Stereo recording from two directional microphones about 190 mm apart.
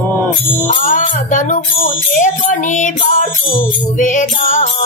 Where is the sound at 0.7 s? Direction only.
40° left (ahead or behind).